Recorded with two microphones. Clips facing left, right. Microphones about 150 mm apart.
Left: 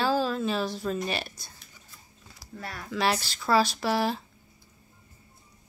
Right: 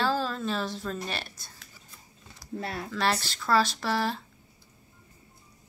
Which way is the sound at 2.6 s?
25° right (ahead or behind).